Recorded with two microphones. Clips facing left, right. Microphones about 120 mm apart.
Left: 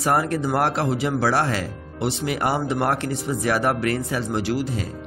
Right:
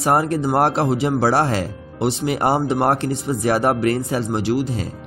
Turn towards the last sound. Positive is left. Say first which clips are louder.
# right 3 dB
turn(degrees=-25)  # may be behind; listen again after turning